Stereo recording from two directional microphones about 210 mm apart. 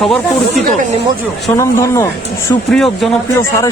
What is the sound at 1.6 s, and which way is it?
Speech, 15° left (ahead or behind).